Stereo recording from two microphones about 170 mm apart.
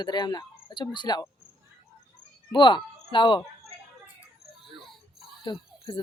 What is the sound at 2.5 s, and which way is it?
Speech, 30° left (ahead or behind).